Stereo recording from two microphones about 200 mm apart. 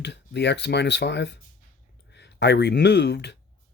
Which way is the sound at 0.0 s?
60° left (ahead or behind).